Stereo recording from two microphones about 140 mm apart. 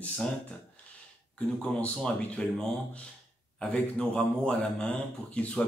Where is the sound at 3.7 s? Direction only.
5° left (ahead or behind).